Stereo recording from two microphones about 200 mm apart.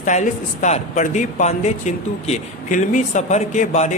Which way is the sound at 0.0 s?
35° left (ahead or behind).